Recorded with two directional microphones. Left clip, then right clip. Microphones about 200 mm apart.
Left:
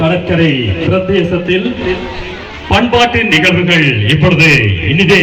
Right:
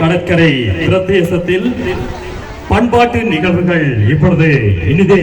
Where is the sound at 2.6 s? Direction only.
60° right (ahead or behind).